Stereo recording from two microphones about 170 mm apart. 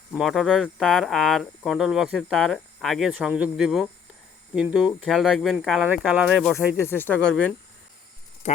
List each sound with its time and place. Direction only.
0.2 s speech: centre (ahead or behind)
6.8 s speech: 10° left (ahead or behind)
8.4 s speech: 40° left (ahead or behind)